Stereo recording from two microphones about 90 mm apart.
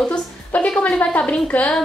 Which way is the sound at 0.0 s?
15° left (ahead or behind).